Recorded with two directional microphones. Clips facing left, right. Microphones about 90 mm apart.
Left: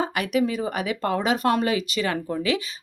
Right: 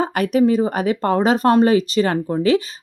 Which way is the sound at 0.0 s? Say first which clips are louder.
Right 7 dB; 40° right (ahead or behind).